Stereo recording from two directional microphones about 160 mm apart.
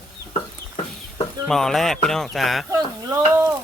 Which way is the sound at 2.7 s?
15° right (ahead or behind).